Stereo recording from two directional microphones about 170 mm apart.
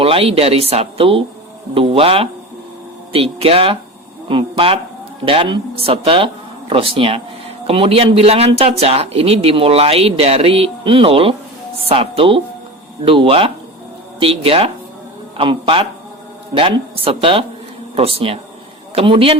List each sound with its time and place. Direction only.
0.0 s speech: 35° right (ahead or behind)
18.9 s speech: 30° right (ahead or behind)